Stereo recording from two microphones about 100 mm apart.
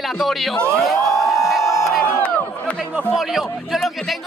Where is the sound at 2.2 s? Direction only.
15° left (ahead or behind).